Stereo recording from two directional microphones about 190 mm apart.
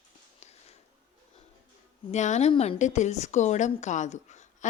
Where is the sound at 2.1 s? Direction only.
35° left (ahead or behind).